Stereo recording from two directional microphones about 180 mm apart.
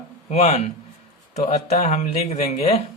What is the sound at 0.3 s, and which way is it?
Speech, 40° left (ahead or behind).